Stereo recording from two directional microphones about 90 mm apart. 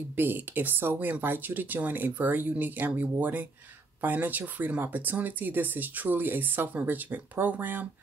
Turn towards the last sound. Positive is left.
turn(degrees=-20)  # may be behind; listen again after turning